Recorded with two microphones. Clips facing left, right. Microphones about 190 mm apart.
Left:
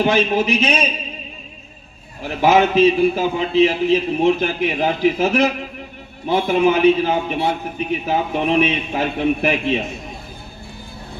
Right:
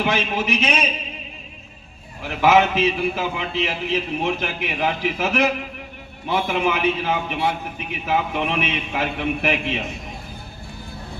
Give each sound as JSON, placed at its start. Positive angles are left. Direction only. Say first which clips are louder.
{"t": 0.0, "sound": "a man's voice", "louder": "left 6 dB", "side_deg": 30}
{"t": 2.2, "sound": "a man's voice", "louder": "left 2 dB", "side_deg": 30}